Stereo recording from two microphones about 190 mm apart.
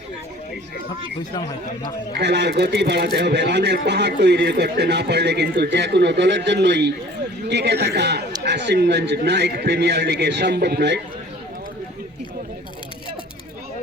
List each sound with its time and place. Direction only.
2.1 s a man's voice: 60° right (ahead or behind)